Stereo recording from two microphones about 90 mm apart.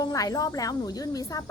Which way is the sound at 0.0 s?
40° left (ahead or behind).